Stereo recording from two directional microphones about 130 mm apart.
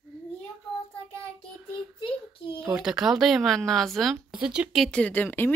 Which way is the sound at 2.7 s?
5° right (ahead or behind).